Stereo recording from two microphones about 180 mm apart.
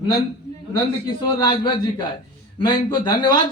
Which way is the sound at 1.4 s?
25° left (ahead or behind).